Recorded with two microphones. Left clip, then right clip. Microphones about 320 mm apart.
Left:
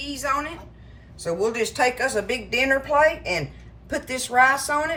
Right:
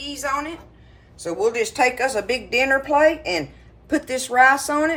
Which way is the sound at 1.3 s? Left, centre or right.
Centre.